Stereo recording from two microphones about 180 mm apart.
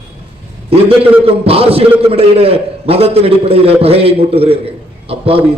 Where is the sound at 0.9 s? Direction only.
30° right (ahead or behind).